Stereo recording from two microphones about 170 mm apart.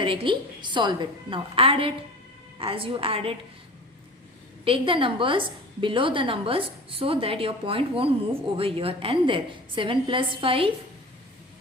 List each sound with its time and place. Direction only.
0.0 s a woman's voice: 30° right (ahead or behind)
4.6 s a woman's voice: 30° right (ahead or behind)